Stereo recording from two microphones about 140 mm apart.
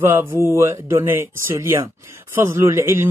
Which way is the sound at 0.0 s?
15° right (ahead or behind).